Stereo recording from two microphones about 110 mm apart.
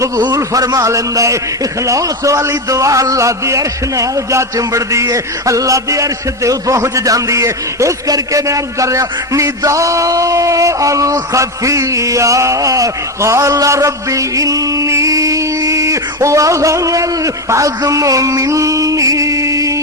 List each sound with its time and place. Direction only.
0.2 s a man's voice: 35° right (ahead or behind)